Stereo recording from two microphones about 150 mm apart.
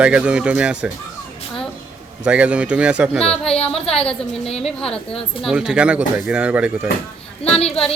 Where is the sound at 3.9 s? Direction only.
5° left (ahead or behind).